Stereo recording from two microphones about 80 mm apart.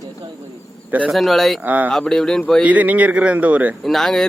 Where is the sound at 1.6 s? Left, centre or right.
Right.